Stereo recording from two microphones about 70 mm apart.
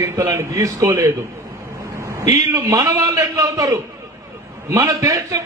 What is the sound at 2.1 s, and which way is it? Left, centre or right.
A man's voice, right.